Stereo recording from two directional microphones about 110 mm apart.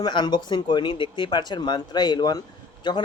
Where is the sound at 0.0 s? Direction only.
40° left (ahead or behind).